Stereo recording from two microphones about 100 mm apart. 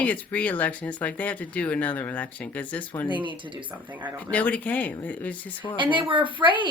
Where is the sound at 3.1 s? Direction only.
55° right (ahead or behind).